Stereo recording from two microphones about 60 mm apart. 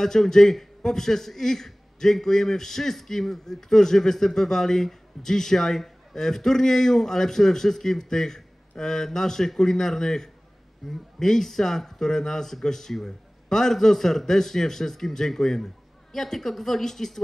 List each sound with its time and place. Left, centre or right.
0.0 s a man's voice: centre